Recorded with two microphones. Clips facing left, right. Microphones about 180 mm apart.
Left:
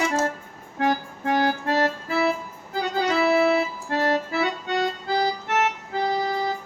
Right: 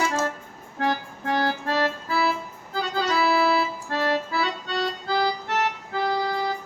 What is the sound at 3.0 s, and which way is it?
Accordion, 55° left (ahead or behind).